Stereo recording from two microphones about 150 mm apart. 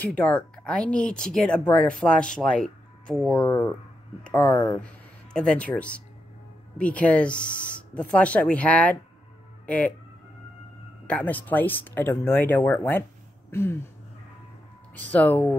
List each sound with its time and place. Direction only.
0.0 s speech: 10° left (ahead or behind)
3.4 s speech: 15° left (ahead or behind)
11.1 s speech: 10° left (ahead or behind)
13.5 s a sound: 15° left (ahead or behind)
15.0 s speech: 10° left (ahead or behind)